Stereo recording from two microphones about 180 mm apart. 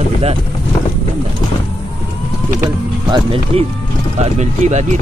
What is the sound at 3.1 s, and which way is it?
Speech, 30° right (ahead or behind).